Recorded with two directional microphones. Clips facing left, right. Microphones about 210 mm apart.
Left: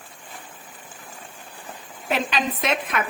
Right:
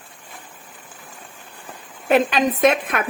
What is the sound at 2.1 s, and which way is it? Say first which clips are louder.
Speech: right 8 dB; 50° right (ahead or behind).